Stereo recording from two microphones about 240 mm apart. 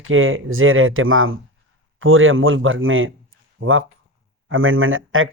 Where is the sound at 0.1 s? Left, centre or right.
Right.